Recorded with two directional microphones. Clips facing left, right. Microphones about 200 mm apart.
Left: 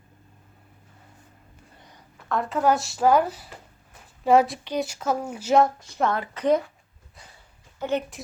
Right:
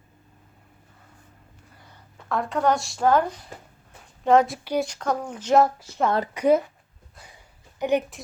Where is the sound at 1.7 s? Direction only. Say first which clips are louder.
Left 1 dB; 15° left (ahead or behind).